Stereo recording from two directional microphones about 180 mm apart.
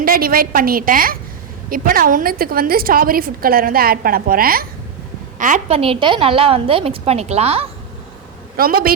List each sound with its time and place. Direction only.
0.0 s a woman's voice: 55° right (ahead or behind); by 7.7 s 35° right (ahead or behind)
8.5 s a woman's voice: 55° right (ahead or behind)